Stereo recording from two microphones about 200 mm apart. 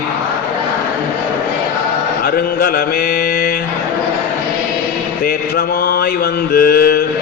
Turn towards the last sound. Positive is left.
turn(degrees=50)  # may be behind; listen again after turning